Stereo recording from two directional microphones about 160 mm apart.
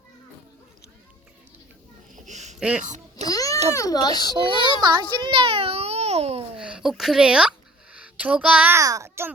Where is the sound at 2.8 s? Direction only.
50° right (ahead or behind).